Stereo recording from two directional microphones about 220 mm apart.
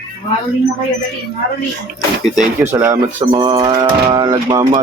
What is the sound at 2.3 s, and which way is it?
Speech, 5° right (ahead or behind).